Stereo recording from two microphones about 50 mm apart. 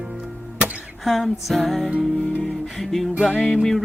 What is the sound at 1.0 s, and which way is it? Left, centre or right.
Music, centre.